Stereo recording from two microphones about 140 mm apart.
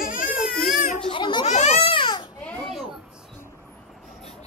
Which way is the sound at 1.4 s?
55° left (ahead or behind).